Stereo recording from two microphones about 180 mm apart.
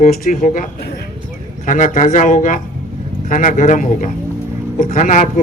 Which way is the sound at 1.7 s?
40° left (ahead or behind).